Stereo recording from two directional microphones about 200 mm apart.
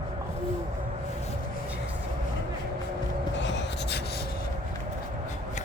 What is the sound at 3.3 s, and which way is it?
Writing, 65° left (ahead or behind).